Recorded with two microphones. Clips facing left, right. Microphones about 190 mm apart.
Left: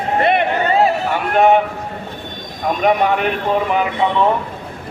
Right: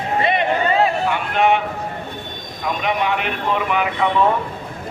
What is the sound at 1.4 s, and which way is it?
Speech, 40° left (ahead or behind).